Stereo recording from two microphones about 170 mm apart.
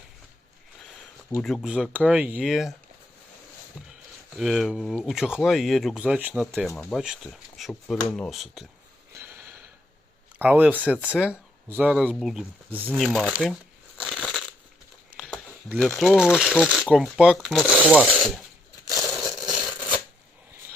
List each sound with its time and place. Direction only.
1.4 s speech: 5° left (ahead or behind)
1.6 s speech: 5° right (ahead or behind)
4.4 s speech: centre (ahead or behind)
9.1 s a sound: 15° right (ahead or behind)
10.3 s speech: 10° right (ahead or behind)
14.0 s crushing: centre (ahead or behind)
16.0 s speech: centre (ahead or behind)
18.9 s crushing: 20° right (ahead or behind)
19.5 s a sound: 5° right (ahead or behind)